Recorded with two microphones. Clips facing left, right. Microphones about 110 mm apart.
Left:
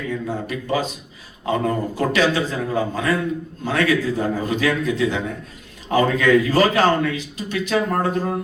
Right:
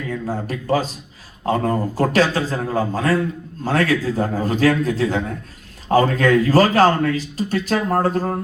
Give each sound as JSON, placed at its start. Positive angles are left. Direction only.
{"t": 0.1, "sound": "a man's voice", "side_deg": -40}